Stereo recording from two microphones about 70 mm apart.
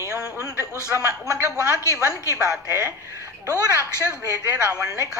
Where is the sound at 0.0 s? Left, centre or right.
Left.